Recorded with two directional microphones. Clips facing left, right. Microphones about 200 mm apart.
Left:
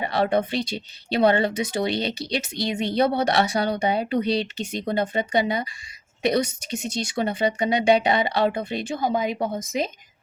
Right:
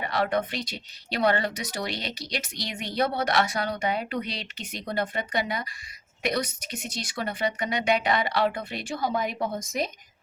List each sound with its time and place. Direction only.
0.0 s speech: 30° left (ahead or behind)